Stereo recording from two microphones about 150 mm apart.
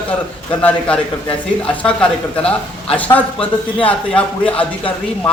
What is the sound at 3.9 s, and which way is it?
Speech, 10° left (ahead or behind).